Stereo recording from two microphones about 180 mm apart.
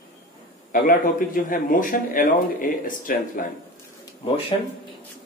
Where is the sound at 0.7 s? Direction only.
50° left (ahead or behind).